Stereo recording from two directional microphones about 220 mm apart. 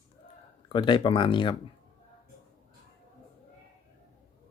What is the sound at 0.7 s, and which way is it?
Speech, 20° left (ahead or behind).